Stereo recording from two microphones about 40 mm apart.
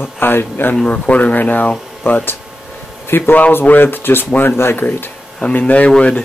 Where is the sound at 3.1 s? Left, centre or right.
Left.